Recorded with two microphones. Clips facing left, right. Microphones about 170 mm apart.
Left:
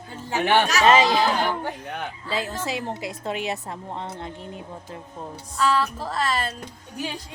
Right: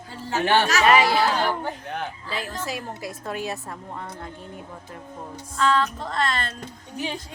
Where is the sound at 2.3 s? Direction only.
25° left (ahead or behind).